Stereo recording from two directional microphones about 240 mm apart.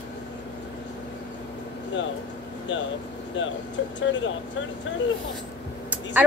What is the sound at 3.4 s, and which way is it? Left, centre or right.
Speech, left.